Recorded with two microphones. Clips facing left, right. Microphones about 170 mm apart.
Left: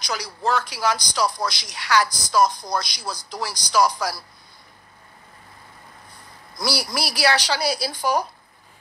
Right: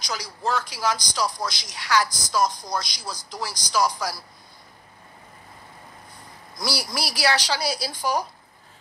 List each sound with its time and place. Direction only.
0.0 s a man's voice: 65° left (ahead or behind)
6.6 s a man's voice: 65° left (ahead or behind)